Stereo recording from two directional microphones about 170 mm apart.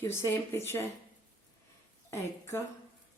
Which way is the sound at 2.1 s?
15° left (ahead or behind).